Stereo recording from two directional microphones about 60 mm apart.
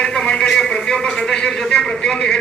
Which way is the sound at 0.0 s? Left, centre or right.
Centre.